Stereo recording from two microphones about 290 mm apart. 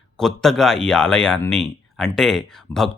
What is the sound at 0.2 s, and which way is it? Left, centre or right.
Speech, centre.